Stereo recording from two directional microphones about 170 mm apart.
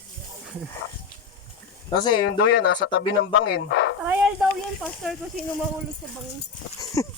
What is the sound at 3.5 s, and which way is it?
Speech, 85° left.